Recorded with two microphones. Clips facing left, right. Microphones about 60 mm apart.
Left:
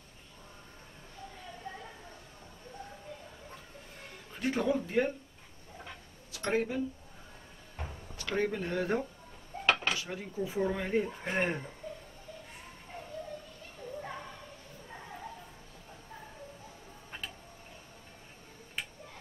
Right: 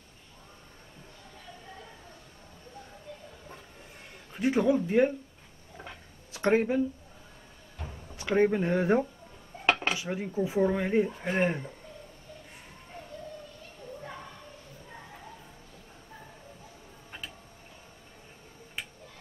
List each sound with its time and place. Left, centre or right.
4.3 s speech: centre
6.5 s speech: right
8.2 s speech: right
11.1 s speech: centre
18.8 s finger snapping: centre